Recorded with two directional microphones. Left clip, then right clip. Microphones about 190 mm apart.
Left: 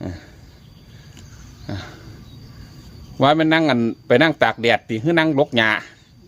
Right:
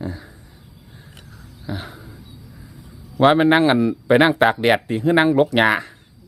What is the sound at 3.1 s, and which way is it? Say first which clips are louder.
Speech: right 1 dB; 15° right (ahead or behind).